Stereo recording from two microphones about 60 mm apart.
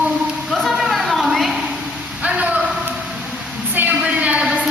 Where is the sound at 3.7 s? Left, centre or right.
Right.